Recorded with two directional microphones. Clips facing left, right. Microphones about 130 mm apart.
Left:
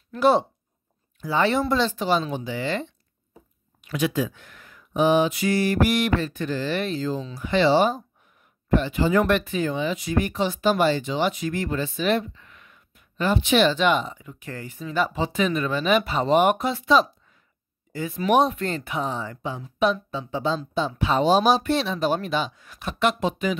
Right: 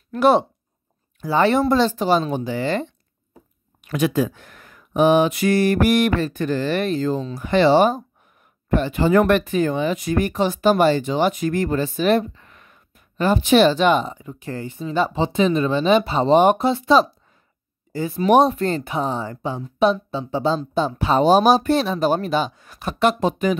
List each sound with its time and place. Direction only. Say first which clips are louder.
0.1 s speech: right 3 dB; 60° right (ahead or behind)
1.2 s speech: right 5 dB; 45° right (ahead or behind)